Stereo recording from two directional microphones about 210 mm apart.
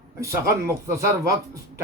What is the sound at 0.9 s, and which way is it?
Speech, 15° right (ahead or behind).